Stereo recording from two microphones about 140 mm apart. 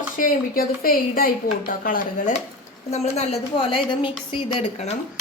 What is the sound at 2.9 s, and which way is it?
A woman's voice, 50° left (ahead or behind).